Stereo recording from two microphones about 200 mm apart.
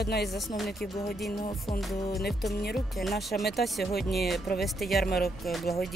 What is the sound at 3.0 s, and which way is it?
Speech, centre (ahead or behind).